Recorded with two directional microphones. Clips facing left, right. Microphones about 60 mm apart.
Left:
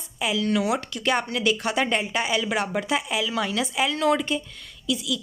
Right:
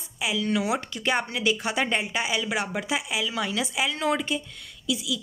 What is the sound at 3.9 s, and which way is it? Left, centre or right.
Speech, right.